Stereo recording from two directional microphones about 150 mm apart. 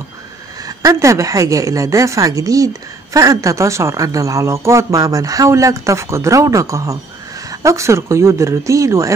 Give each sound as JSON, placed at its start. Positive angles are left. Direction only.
{"t": 0.7, "sound": "a woman's voice", "side_deg": -20}